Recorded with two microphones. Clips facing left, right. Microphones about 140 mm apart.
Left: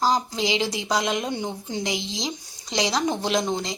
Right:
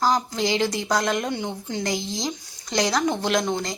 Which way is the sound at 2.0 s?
90° left.